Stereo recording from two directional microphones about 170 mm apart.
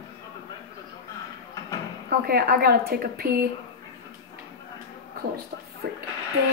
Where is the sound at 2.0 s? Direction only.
65° right (ahead or behind).